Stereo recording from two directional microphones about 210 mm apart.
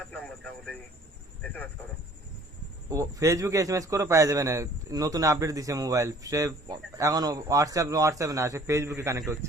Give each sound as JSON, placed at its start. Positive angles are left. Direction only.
{"t": 0.1, "sound": "radio", "side_deg": 5}
{"t": 1.4, "sound": "speech", "side_deg": 10}
{"t": 2.9, "sound": "a man's voice", "side_deg": -15}